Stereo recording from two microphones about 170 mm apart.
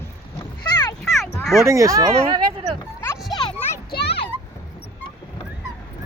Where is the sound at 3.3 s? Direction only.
25° left (ahead or behind).